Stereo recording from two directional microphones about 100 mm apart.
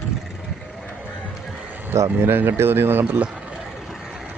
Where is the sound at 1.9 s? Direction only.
25° right (ahead or behind).